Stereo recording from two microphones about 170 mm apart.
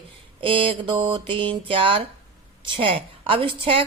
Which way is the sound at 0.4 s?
30° right (ahead or behind).